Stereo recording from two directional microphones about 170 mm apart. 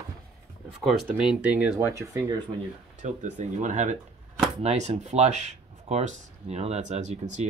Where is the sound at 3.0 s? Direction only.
45° right (ahead or behind).